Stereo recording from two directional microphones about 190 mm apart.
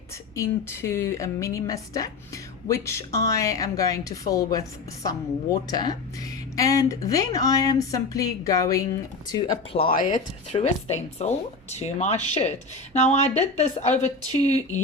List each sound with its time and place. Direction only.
0.3 s speech: 15° left (ahead or behind)
5.6 s speech: 20° left (ahead or behind)
9.3 s speech: 30° left (ahead or behind)